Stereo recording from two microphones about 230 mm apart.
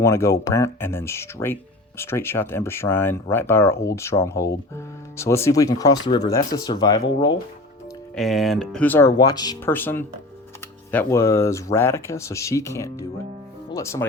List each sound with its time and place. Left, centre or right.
0.0 s speech: centre
8.1 s speech: centre